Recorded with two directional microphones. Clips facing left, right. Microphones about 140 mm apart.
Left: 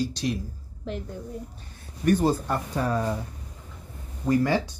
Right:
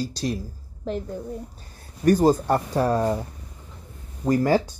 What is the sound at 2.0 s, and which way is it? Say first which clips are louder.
Speech: right 4 dB; 40° right (ahead or behind).